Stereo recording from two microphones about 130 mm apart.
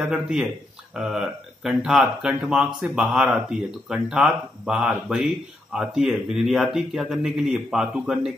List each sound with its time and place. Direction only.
0.1 s speech: 5° right (ahead or behind)